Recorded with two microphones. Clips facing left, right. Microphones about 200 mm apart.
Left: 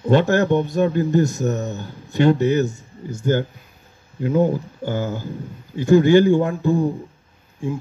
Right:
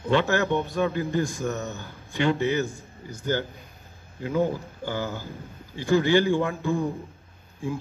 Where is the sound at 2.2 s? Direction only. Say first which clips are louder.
Left 7 dB; 45° left (ahead or behind).